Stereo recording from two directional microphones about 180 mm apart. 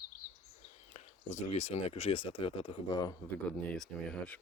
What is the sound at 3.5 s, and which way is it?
Speech, 5° left (ahead or behind).